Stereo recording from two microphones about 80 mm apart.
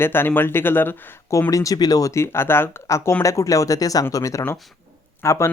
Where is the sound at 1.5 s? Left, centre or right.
Left.